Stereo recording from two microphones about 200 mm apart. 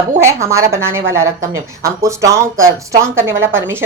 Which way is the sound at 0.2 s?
15° right (ahead or behind).